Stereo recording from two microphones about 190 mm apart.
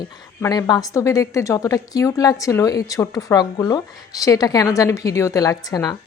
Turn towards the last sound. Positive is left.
turn(degrees=20)  # may be behind; listen again after turning